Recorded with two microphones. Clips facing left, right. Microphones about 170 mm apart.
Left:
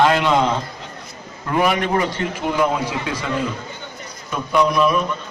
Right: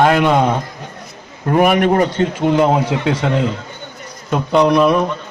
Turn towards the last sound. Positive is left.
turn(degrees=-70)  # may be behind; listen again after turning